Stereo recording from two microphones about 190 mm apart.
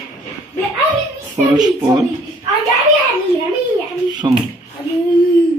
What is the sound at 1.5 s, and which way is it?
Speech, 20° right (ahead or behind).